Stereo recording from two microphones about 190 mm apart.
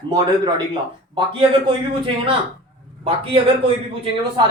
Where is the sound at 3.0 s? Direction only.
30° right (ahead or behind).